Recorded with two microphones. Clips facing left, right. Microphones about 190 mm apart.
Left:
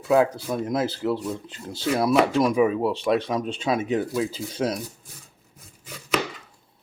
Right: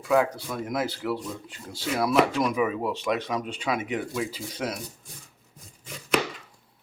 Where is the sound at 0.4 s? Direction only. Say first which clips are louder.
Left 4 dB; 25° left (ahead or behind).